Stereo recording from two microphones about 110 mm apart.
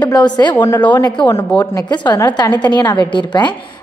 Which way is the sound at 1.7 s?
40° left (ahead or behind).